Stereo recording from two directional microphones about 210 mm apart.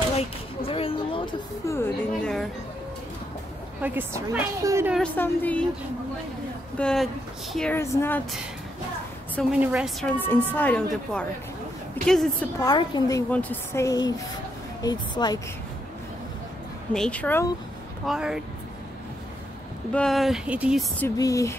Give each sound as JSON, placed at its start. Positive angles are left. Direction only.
{"t": 0.2, "sound": "a sound", "side_deg": 25}
{"t": 1.7, "sound": "a woman's voice", "side_deg": 10}
{"t": 3.8, "sound": "a woman's voice", "side_deg": -10}
{"t": 4.9, "sound": "a woman's voice", "side_deg": 5}
{"t": 6.8, "sound": "a woman's voice", "side_deg": 5}
{"t": 9.3, "sound": "a woman's voice", "side_deg": 0}
{"t": 12.5, "sound": "a woman's voice", "side_deg": 20}
{"t": 13.3, "sound": "a woman's voice", "side_deg": 10}
{"t": 16.9, "sound": "a woman's voice", "side_deg": 5}
{"t": 18.0, "sound": "a woman's voice", "side_deg": -5}
{"t": 19.9, "sound": "a woman's voice", "side_deg": 5}
{"t": 21.0, "sound": "a woman's voice", "side_deg": 15}